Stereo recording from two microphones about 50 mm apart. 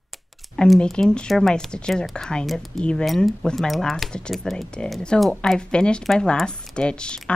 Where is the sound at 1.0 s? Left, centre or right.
Left.